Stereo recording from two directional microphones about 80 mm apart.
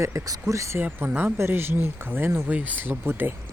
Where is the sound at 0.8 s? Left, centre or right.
Right.